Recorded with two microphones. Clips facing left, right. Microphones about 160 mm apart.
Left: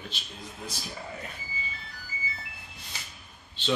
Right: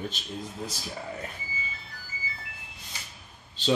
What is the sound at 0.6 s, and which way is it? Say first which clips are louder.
Speech: even; 35° right (ahead or behind).